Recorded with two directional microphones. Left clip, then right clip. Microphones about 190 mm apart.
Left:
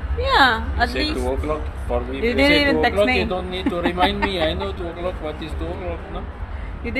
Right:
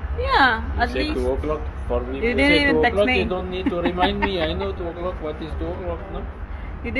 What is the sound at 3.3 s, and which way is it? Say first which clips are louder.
Speech: left 1 dB; 15° right (ahead or behind).